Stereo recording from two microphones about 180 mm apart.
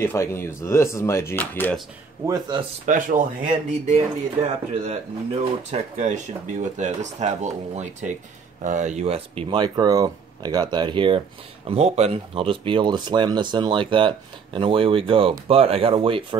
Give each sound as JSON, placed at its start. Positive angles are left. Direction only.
{"t": 0.0, "sound": "speech", "side_deg": 15}
{"t": 2.2, "sound": "speech", "side_deg": -25}
{"t": 2.9, "sound": "speech", "side_deg": -45}
{"t": 3.9, "sound": "speech", "side_deg": -35}